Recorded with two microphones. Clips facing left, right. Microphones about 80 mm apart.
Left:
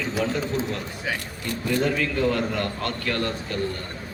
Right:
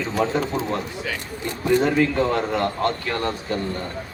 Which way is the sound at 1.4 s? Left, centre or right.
Right.